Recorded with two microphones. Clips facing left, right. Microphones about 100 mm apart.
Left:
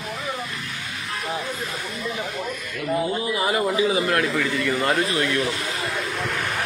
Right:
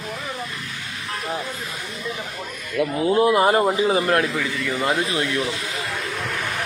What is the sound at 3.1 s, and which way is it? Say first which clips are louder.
Speech: right 7 dB; 65° right (ahead or behind).